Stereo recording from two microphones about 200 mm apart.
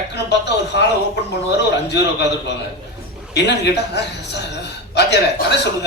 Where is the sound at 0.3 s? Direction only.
60° left (ahead or behind).